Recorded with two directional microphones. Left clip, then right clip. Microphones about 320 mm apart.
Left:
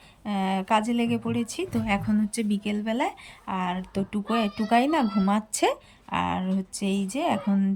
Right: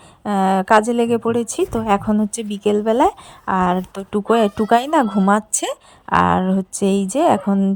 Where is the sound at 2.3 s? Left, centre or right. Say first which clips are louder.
Right 11 dB; centre.